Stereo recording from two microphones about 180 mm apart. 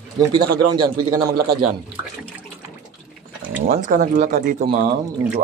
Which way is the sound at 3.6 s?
50° right (ahead or behind).